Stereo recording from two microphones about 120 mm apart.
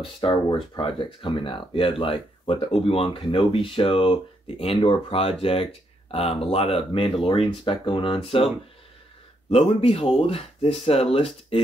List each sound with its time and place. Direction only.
0.0 s speech: 45° left (ahead or behind)
9.5 s speech: 50° left (ahead or behind)